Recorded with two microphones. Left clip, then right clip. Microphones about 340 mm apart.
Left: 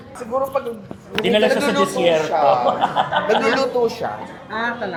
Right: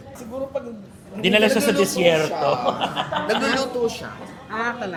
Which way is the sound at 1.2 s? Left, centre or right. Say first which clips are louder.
Left 1 dB; right.